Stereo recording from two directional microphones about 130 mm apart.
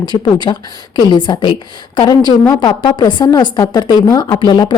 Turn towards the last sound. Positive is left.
turn(degrees=35)  # may be behind; listen again after turning